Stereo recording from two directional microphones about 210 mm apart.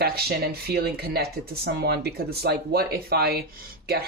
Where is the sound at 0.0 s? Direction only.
50° right (ahead or behind).